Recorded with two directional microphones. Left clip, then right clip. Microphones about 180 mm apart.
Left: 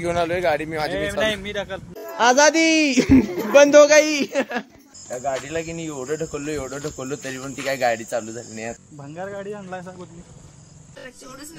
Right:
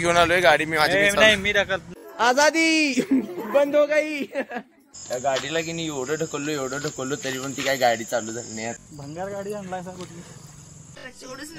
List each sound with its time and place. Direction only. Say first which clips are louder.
0.0 s speech: right 4 dB; centre (ahead or behind)
0.9 s a man's voice: right 7 dB; 20° right (ahead or behind)
3.1 s speech: left 7 dB; 15° left (ahead or behind)
4.0 s speech: left 6 dB; centre (ahead or behind)
5.5 s speech: right 1 dB; 15° left (ahead or behind)
7.2 s speech: right 2 dB; centre (ahead or behind)
9.1 s speech: even; 15° left (ahead or behind)
9.5 s speech: right 1 dB; centre (ahead or behind)